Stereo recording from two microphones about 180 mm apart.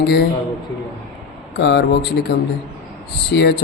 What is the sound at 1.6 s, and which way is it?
A man's voice, 70° left (ahead or behind).